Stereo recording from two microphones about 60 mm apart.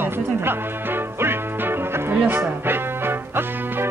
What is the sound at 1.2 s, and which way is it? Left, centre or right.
Music, right.